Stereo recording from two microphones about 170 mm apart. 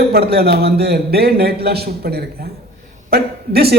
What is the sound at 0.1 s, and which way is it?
A man's voice, 65° right (ahead or behind).